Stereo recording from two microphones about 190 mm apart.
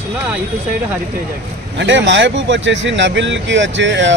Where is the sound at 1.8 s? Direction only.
70° right (ahead or behind).